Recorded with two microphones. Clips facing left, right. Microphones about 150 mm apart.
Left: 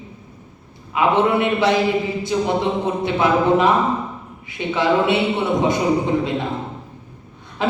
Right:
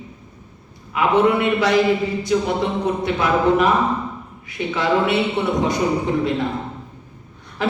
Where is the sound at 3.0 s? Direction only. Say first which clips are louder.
Left 2 dB; 25° left (ahead or behind).